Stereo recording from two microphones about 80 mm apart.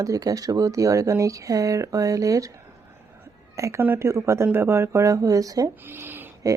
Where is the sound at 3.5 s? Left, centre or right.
Right.